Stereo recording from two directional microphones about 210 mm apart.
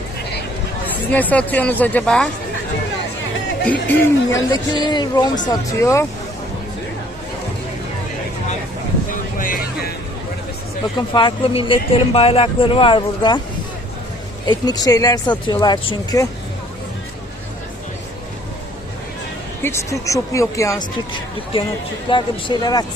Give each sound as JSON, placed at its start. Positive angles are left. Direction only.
{"t": 1.1, "sound": "speech", "side_deg": 5}
{"t": 3.6, "sound": "speech", "side_deg": 10}
{"t": 9.4, "sound": "music", "side_deg": 40}
{"t": 10.9, "sound": "speech", "side_deg": 20}
{"t": 14.4, "sound": "speech", "side_deg": 20}
{"t": 19.6, "sound": "speech", "side_deg": 15}